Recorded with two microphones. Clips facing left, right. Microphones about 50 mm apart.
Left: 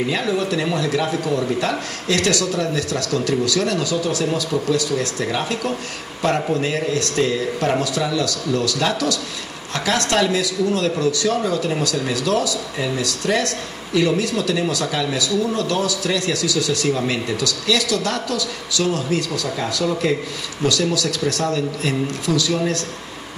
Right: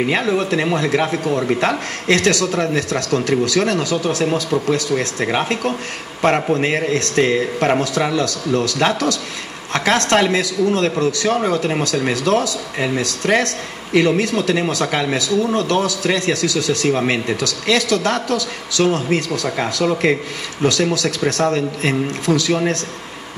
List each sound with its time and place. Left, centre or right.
0.0 s a man's voice: right